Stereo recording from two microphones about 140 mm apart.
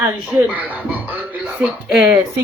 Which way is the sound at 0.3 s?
10° right (ahead or behind).